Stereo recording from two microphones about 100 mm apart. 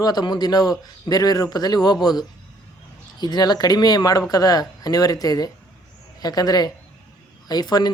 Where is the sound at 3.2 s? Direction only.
45° left (ahead or behind).